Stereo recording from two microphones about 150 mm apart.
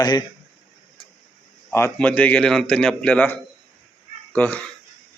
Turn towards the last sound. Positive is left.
turn(degrees=10)  # may be behind; listen again after turning